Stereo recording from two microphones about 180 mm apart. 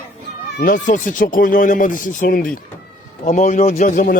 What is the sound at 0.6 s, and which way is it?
Speech, 45° left (ahead or behind).